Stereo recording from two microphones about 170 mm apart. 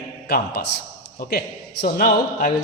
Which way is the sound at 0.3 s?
70° left (ahead or behind).